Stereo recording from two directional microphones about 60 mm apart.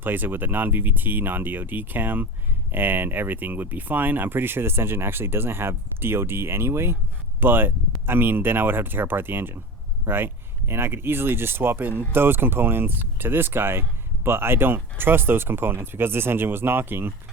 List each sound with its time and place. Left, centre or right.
0.0 s speech: right